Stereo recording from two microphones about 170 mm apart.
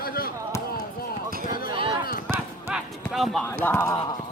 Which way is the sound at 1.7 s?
30° right (ahead or behind).